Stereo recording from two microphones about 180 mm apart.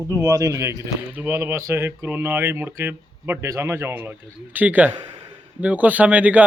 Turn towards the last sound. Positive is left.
turn(degrees=-10)  # may be behind; listen again after turning